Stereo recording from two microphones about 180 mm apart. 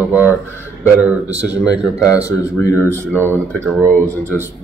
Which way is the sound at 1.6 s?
5° right (ahead or behind).